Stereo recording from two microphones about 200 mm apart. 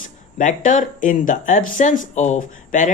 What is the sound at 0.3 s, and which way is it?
Speech, 40° left (ahead or behind).